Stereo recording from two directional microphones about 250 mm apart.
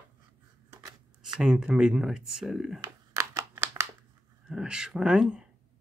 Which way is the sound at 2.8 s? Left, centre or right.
Centre.